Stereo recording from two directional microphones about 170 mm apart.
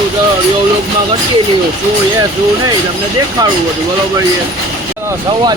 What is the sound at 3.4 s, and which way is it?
Speech, 20° right (ahead or behind).